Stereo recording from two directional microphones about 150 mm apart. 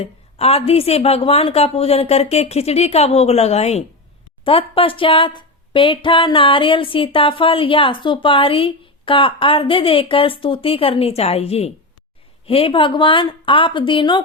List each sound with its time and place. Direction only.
0.0 s a woman's voice: 45° left (ahead or behind)